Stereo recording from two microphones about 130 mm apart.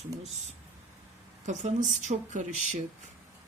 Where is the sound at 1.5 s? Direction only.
70° right (ahead or behind).